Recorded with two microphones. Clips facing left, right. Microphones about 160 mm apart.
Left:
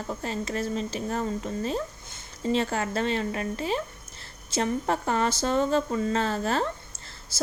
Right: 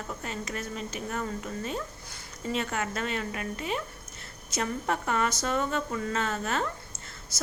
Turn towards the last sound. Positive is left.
turn(degrees=30)  # may be behind; listen again after turning